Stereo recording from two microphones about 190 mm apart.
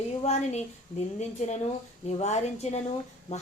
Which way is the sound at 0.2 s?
35° left (ahead or behind).